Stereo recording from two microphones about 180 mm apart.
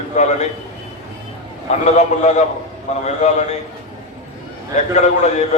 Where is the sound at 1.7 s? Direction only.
40° left (ahead or behind).